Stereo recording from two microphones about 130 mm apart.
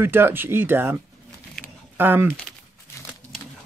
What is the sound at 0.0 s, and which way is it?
Speech, 15° right (ahead or behind).